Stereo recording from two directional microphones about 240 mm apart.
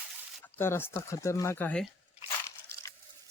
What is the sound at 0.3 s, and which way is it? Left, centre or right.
Speech, centre.